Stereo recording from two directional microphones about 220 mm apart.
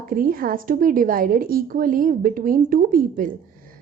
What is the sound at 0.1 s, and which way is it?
A woman's voice, 40° right (ahead or behind).